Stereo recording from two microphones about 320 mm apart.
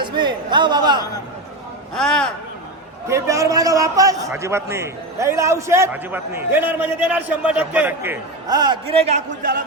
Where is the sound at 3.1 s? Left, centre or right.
Centre.